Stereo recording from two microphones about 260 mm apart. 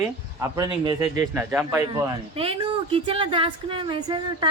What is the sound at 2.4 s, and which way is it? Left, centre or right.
Speech, right.